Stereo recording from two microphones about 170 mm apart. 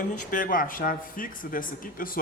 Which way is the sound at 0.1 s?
50° left (ahead or behind).